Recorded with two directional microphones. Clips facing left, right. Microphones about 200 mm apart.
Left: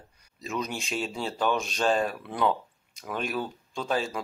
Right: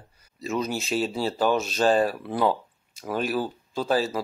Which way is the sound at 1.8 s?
35° right (ahead or behind).